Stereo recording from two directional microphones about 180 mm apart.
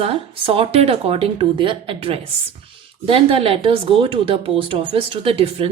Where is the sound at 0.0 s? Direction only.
30° right (ahead or behind).